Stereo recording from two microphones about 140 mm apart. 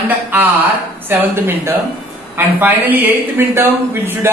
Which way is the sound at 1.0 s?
15° right (ahead or behind).